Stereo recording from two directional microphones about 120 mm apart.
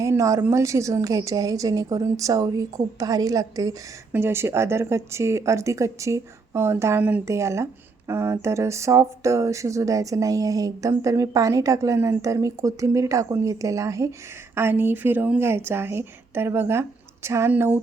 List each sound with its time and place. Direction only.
0.0 s speech: 25° right (ahead or behind)